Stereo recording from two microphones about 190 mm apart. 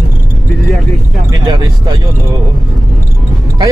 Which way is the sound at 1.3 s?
20° right (ahead or behind).